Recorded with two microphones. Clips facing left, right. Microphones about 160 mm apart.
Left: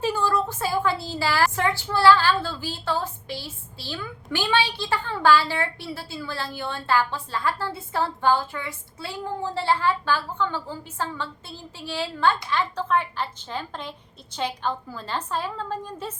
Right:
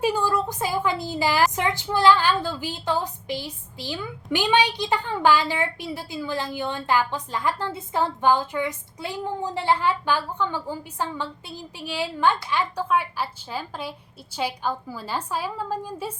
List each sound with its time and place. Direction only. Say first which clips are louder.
0.0 s a woman's voice: right 1 dB; 15° right (ahead or behind)